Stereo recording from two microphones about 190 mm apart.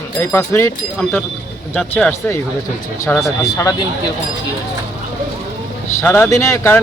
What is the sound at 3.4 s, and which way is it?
Speech, 15° left (ahead or behind).